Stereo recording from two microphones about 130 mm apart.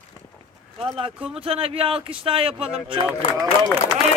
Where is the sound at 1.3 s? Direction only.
50° right (ahead or behind).